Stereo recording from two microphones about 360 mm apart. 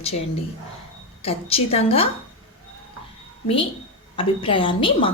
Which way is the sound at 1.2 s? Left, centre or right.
Centre.